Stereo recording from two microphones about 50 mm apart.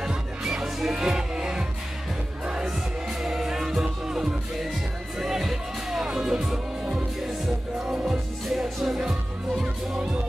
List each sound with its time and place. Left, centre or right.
0.0 s music: centre
9.6 s music: centre